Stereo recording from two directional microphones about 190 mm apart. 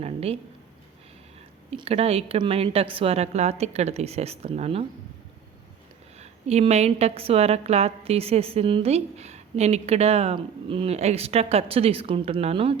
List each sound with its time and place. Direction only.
0.0 s speech: 30° right (ahead or behind)
1.7 s a woman's voice: 30° right (ahead or behind)
6.1 s a woman's voice: 35° right (ahead or behind)